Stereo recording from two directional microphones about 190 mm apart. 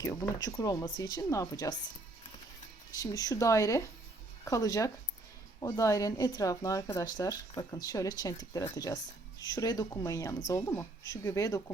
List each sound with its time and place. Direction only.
0.0 s speech: 15° left (ahead or behind)
3.0 s speech: 20° left (ahead or behind)